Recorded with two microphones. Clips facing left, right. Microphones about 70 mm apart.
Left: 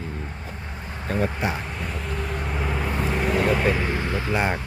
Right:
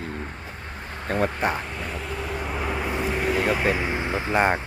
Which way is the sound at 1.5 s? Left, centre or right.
Centre.